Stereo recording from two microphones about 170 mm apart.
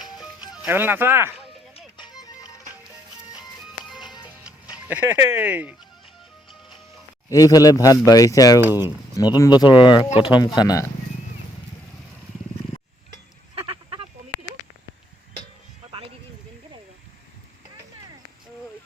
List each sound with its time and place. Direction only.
0.0 s music: centre (ahead or behind)
0.5 s speech: 10° right (ahead or behind)
2.0 s music: 25° left (ahead or behind)
3.3 s music: 5° right (ahead or behind)
4.0 s music: 25° left (ahead or behind)
4.9 s speech: 10° right (ahead or behind)
7.3 s speech: 20° left (ahead or behind)
13.6 s a sound: 30° right (ahead or behind)